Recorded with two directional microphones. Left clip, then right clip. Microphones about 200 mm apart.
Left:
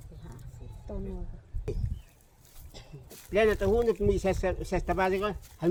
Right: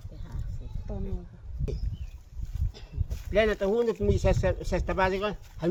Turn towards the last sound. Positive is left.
turn(degrees=-5)  # may be behind; listen again after turning